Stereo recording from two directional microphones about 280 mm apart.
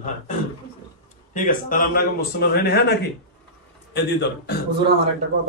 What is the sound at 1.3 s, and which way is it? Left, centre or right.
A man's voice, left.